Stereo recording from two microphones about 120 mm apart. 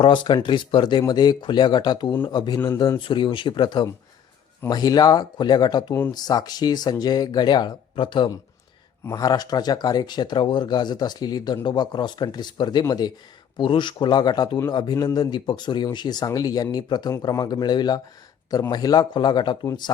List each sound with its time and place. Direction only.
0.0 s speech: 40° left (ahead or behind)
9.0 s speech: 30° left (ahead or behind)